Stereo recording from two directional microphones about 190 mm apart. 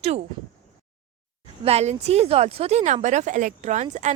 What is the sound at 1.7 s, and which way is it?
Speech, 35° right (ahead or behind).